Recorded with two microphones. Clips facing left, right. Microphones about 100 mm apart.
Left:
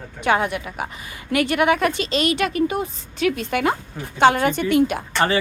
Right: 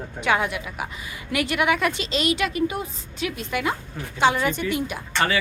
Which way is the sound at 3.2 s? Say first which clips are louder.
Left 6 dB; 65° left (ahead or behind).